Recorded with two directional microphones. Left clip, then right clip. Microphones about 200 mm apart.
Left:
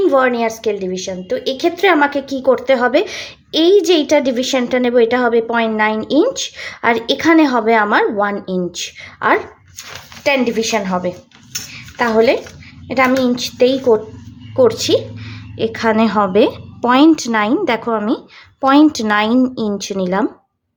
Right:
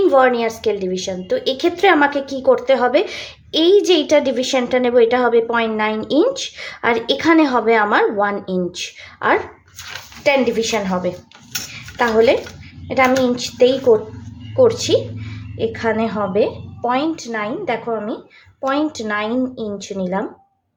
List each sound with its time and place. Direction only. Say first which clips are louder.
0.0 s a woman's voice: even; 15° left (ahead or behind)
11.7 s dishes: left 1 dB; 15° left (ahead or behind)
12.9 s a woman's voice: left 1 dB; 15° left (ahead or behind); by 20.2 s 35° left (ahead or behind)